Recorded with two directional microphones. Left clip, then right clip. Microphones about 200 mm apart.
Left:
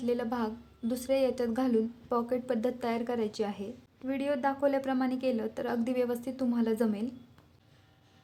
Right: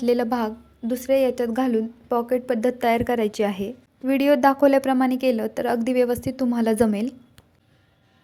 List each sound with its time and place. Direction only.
0.0 s a woman's voice: 30° right (ahead or behind)